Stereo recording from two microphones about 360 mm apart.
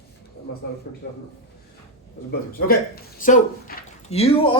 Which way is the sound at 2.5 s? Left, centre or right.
Left.